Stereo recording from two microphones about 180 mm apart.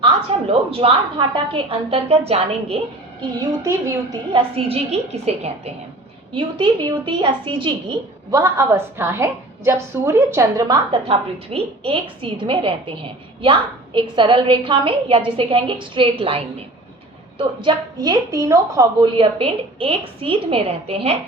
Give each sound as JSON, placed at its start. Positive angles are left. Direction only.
{"t": 0.3, "sound": "a woman's voice", "side_deg": -35}
{"t": 3.2, "sound": "a woman's voice", "side_deg": -25}
{"t": 6.3, "sound": "a woman's voice", "side_deg": -25}
{"t": 11.1, "sound": "a woman's voice", "side_deg": -30}